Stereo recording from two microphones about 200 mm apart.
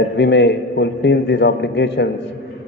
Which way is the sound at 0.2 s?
60° left (ahead or behind).